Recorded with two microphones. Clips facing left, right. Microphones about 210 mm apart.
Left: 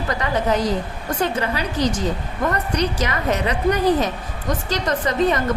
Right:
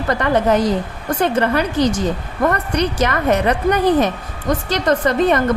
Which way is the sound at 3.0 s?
55° right (ahead or behind).